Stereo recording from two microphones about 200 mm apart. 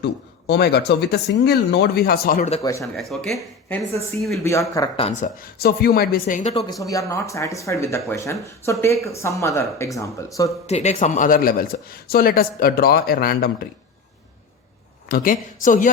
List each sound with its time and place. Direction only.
0.0 s speech: 55° left (ahead or behind)
2.8 s speech: centre (ahead or behind)
3.3 s speech: 15° left (ahead or behind)
4.9 s a woman's voice: 35° left (ahead or behind)
6.7 s speech: 15° left (ahead or behind)
10.7 s speech: 35° left (ahead or behind)
15.1 s a woman's voice: 45° left (ahead or behind)